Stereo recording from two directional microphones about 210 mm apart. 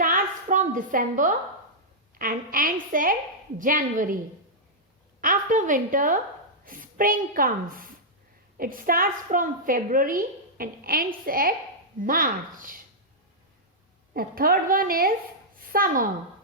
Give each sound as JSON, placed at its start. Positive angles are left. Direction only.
{"t": 0.0, "sound": "a sound", "side_deg": -40}
{"t": 2.1, "sound": "a woman's voice", "side_deg": -40}
{"t": 5.2, "sound": "a woman's voice", "side_deg": -40}
{"t": 14.1, "sound": "a woman's voice", "side_deg": -45}